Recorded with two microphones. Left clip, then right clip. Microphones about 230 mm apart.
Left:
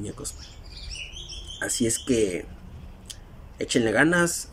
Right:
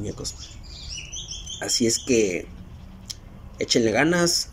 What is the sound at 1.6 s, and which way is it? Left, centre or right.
Speech, centre.